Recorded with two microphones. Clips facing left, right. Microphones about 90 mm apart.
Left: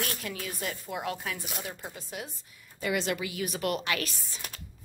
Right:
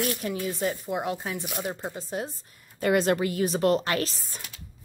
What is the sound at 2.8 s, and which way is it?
Speech, 45° right (ahead or behind).